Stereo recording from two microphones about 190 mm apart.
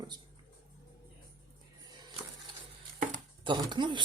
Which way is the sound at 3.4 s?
25° right (ahead or behind).